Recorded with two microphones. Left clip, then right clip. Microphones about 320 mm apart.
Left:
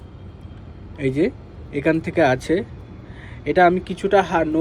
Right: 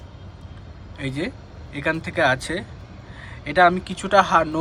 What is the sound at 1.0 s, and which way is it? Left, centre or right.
Speech, centre.